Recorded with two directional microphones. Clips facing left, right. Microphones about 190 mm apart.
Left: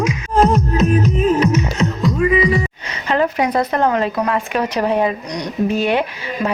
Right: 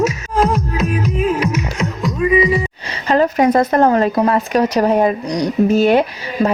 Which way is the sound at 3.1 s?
40° right (ahead or behind).